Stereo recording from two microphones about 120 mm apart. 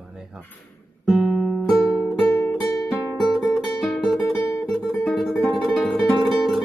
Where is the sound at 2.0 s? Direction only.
20° left (ahead or behind).